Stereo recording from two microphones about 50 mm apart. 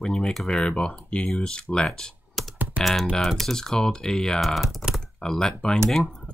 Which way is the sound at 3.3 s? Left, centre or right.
Centre.